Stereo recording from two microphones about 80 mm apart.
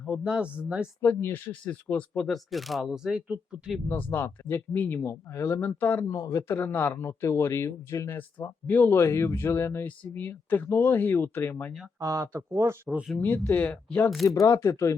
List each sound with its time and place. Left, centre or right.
0.3 s speech: centre
1.0 s speech: left
2.2 s speech: centre
3.1 s speech: centre
3.8 s speech: left
6.1 s speech: left
6.7 s speech: left
7.1 s speech: left
11.9 s speech: right
13.1 s speech: left
14.3 s speech: left